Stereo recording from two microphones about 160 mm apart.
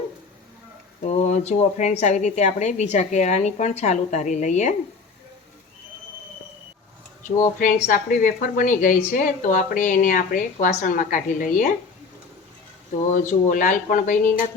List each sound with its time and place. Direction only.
1.0 s speech: 45° left (ahead or behind)
7.9 s speech: 60° left (ahead or behind)
13.1 s speech: 55° left (ahead or behind)